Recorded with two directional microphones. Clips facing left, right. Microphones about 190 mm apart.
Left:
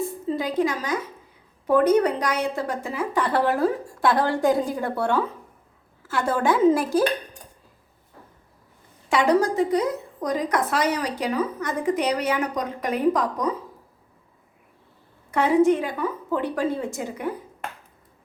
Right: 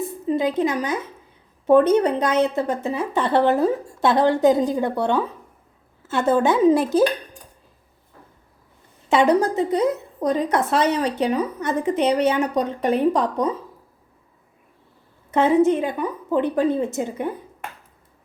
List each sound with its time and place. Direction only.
0.3 s a woman's voice: 20° right (ahead or behind)
9.0 s a woman's voice: 20° right (ahead or behind)
15.3 s a woman's voice: 20° right (ahead or behind)